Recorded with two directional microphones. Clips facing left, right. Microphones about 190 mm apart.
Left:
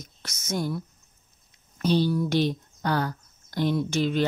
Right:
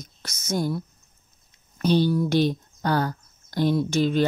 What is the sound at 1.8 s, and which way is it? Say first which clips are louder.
Speech: right 2 dB; 50° right (ahead or behind).